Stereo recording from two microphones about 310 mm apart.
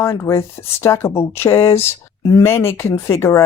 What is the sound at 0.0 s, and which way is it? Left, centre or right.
Speech, centre.